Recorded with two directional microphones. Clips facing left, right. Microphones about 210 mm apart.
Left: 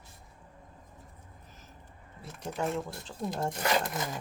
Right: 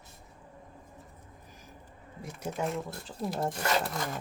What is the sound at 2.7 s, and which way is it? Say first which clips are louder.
Speech: left 1 dB; centre (ahead or behind).